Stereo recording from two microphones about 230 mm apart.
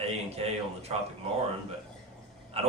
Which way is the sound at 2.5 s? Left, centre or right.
Right.